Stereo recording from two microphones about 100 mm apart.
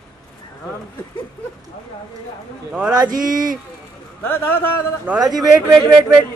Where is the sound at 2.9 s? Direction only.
40° right (ahead or behind).